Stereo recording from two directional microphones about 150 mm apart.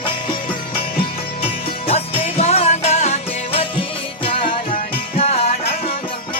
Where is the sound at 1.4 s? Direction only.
40° left (ahead or behind).